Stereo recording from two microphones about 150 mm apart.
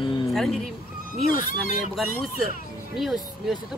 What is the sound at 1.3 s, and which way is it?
Speech, 65° left (ahead or behind).